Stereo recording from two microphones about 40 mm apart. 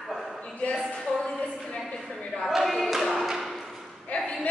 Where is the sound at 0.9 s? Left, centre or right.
Centre.